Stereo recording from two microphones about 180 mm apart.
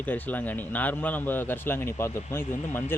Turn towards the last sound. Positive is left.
turn(degrees=10)  # may be behind; listen again after turning